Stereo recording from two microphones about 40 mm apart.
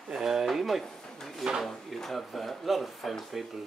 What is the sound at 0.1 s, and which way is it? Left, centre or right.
Speech, centre.